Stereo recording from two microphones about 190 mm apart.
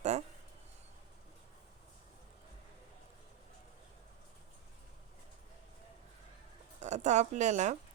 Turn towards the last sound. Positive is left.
turn(degrees=-40)  # may be behind; listen again after turning